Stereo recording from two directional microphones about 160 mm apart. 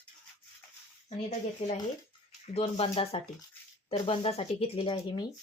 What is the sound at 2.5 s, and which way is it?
Speech, 40° left (ahead or behind).